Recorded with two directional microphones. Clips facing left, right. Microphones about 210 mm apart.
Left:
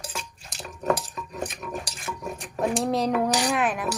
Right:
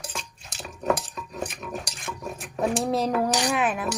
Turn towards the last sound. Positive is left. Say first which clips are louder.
# even
turn(degrees=0)  # may be behind; listen again after turning